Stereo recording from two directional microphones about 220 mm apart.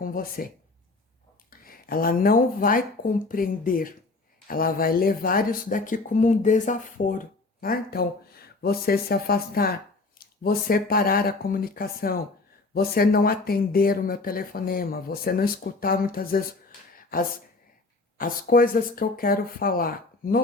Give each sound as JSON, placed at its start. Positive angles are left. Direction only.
{"t": 0.0, "sound": "speech", "side_deg": 40}